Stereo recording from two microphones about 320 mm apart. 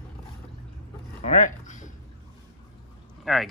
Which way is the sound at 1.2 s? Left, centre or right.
Left.